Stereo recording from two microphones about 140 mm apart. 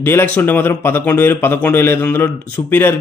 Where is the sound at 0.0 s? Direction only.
15° left (ahead or behind).